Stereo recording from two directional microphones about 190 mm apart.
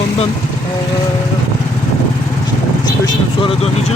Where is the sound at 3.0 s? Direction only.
25° left (ahead or behind).